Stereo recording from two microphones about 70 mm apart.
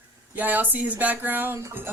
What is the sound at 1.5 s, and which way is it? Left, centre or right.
Music, right.